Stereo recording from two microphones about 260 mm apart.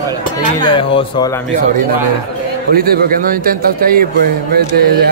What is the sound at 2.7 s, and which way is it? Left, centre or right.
Speech, right.